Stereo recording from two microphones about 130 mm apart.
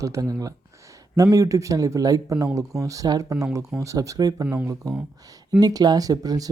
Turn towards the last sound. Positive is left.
turn(degrees=-30)  # may be behind; listen again after turning